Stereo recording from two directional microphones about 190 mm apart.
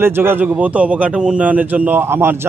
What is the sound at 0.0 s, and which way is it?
A man's voice, 10° right (ahead or behind).